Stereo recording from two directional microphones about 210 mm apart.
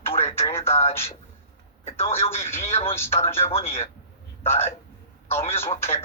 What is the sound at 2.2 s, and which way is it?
Speech, 30° left (ahead or behind).